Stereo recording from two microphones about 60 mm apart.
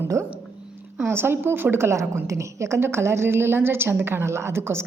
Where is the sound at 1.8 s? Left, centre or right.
Right.